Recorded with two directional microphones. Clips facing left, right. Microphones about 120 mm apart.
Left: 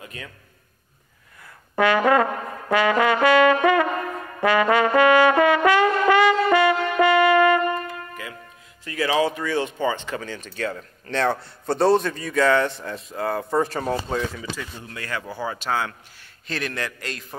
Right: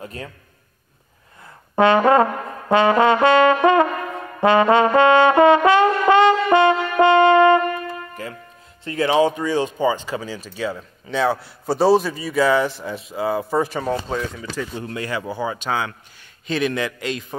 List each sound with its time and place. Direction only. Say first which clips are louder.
0.0 s a man's voice: right 6 dB; 40° right (ahead or behind)
1.8 s brass instrument: right 4 dB; 25° right (ahead or behind)
9.8 s speech: right 4 dB; 15° right (ahead or behind)
15.0 s speech: right 4 dB; 15° right (ahead or behind)
15.2 s speech: right 3 dB; 5° right (ahead or behind)